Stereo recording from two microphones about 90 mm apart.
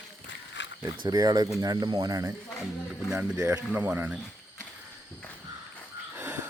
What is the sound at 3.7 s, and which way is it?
Speech, 15° right (ahead or behind).